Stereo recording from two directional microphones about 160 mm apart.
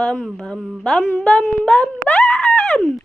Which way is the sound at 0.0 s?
5° left (ahead or behind).